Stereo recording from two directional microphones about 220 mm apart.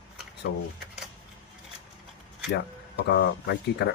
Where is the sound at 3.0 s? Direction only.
50° left (ahead or behind).